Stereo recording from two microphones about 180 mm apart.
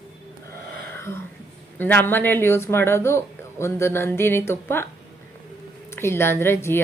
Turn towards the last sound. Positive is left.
turn(degrees=15)  # may be behind; listen again after turning